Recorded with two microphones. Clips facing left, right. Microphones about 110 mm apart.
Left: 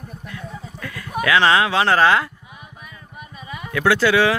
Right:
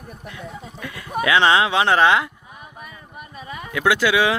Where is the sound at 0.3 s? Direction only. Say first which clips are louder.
Even; 20° right (ahead or behind).